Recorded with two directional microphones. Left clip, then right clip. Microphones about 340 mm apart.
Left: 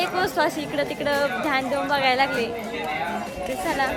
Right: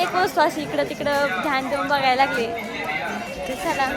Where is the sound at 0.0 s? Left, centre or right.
Centre.